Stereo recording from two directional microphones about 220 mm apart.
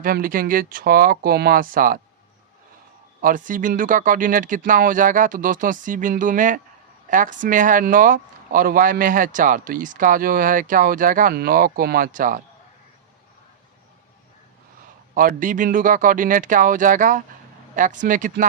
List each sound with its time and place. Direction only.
0.0 s speech: 40° right (ahead or behind)
3.2 s speech: 35° right (ahead or behind)
15.1 s speech: 40° right (ahead or behind)